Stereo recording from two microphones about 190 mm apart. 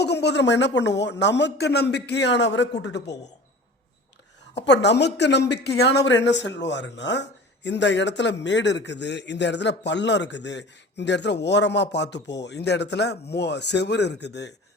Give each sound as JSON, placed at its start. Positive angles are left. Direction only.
{"t": 0.0, "sound": "a man's voice", "side_deg": 60}
{"t": 4.5, "sound": "a man's voice", "side_deg": 65}